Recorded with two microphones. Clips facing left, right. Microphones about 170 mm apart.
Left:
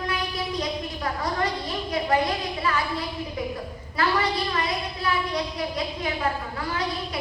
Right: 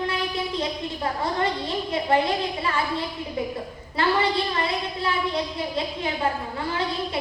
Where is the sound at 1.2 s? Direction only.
25° right (ahead or behind).